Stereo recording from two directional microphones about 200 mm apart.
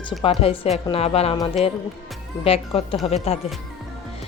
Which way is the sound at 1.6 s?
Centre (ahead or behind).